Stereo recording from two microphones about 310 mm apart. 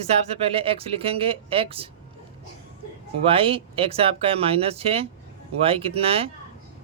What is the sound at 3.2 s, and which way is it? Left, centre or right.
Speech, centre.